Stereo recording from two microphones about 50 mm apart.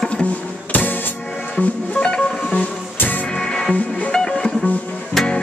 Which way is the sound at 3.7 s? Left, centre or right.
Left.